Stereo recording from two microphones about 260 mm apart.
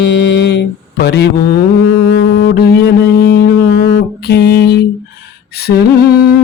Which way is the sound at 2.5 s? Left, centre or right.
Left.